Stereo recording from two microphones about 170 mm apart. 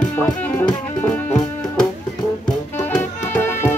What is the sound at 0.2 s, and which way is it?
Music, 10° left (ahead or behind).